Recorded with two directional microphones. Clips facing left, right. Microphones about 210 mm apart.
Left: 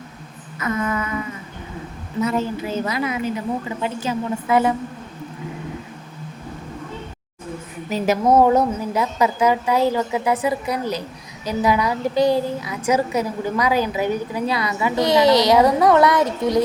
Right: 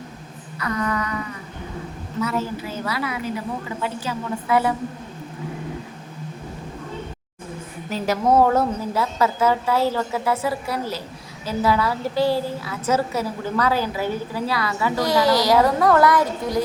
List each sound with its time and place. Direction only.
0.6 s a woman's voice: 20° left (ahead or behind)
2.2 s a woman's voice: 20° left (ahead or behind)
7.9 s a woman's voice: 20° left (ahead or behind)